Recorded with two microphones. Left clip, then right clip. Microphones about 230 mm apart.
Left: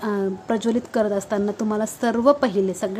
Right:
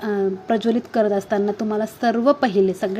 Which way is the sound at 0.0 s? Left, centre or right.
Centre.